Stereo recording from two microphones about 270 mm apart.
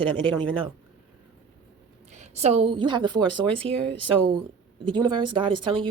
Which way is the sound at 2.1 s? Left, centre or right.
Right.